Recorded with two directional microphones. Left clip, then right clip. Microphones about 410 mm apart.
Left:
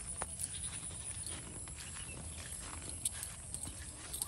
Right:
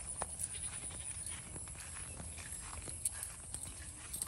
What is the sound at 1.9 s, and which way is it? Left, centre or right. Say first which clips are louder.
Horse: left 1 dB; centre.